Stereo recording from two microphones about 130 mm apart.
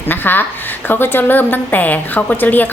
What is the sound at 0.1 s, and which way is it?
A woman's voice, 15° left (ahead or behind).